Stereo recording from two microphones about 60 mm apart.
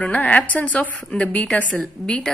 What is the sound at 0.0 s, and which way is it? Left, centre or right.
A woman's voice, left.